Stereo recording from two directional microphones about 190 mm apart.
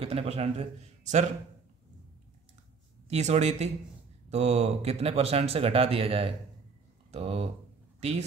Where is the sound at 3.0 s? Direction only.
35° right (ahead or behind).